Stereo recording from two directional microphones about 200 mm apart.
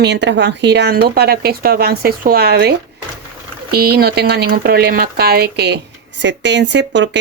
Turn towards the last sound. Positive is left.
turn(degrees=-65)  # may be behind; listen again after turning